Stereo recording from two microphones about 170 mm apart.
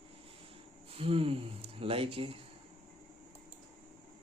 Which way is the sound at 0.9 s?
35° right (ahead or behind).